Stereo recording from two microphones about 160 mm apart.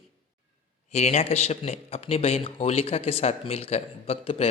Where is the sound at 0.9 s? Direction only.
45° left (ahead or behind).